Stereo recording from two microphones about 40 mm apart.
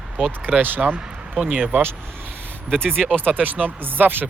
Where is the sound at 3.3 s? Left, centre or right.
Right.